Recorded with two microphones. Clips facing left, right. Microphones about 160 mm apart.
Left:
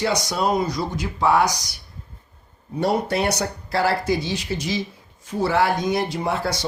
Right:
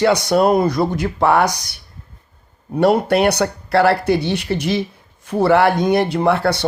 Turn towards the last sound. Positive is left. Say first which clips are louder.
# right 8 dB
turn(degrees=-65)  # may be behind; listen again after turning